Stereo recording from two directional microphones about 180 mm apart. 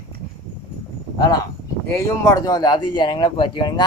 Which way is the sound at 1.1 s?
20° left (ahead or behind).